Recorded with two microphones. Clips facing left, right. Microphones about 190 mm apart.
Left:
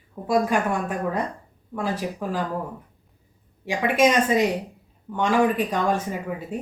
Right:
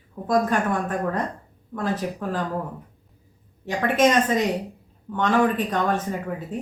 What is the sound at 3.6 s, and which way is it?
Speech, 10° left (ahead or behind).